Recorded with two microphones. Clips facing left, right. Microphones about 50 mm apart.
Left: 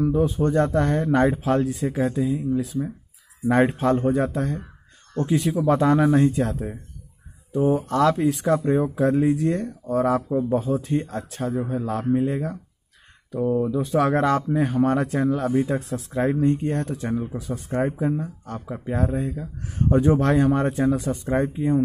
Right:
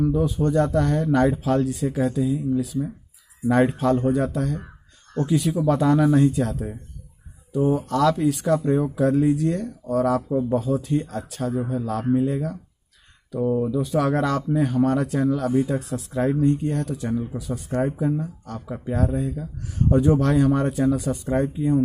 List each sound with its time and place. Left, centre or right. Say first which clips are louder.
0.0 s speech: left 1 dB; left
13.6 s speech: left 1 dB; left